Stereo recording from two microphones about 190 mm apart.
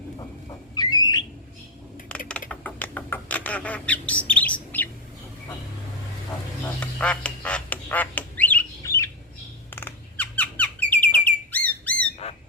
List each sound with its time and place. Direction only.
0.8 s a sound: 20° left (ahead or behind)
2.0 s typing: 5° left (ahead or behind)
2.5 s bird: 10° left (ahead or behind)
6.7 s duck: 5° left (ahead or behind)
9.6 s bird: 10° left (ahead or behind)
12.2 s a sound: 30° left (ahead or behind)